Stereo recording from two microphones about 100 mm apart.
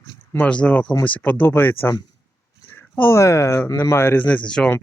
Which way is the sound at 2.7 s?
20° left (ahead or behind).